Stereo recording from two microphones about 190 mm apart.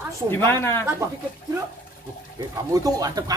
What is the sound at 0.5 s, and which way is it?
Speech, 10° left (ahead or behind).